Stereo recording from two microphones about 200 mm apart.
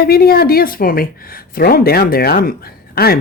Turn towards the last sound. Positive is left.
turn(degrees=50)  # may be behind; listen again after turning